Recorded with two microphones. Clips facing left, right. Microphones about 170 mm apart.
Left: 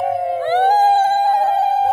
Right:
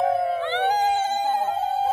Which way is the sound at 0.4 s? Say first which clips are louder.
Left 8 dB; 45° left (ahead or behind).